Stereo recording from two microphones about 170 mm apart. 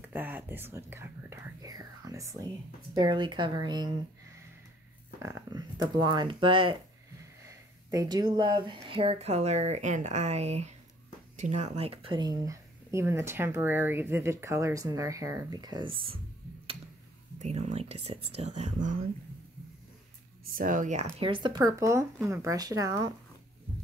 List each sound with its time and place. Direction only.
0.0 s speech: 10° right (ahead or behind)
5.2 s speech: 20° right (ahead or behind)
17.4 s speech: 40° right (ahead or behind)
20.5 s speech: 50° right (ahead or behind); by 23.1 s 20° right (ahead or behind)